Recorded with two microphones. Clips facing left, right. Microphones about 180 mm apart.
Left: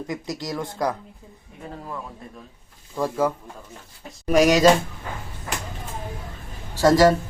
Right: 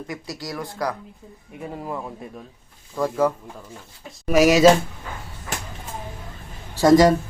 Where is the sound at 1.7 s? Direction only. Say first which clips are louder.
Right 4 dB; 20° right (ahead or behind).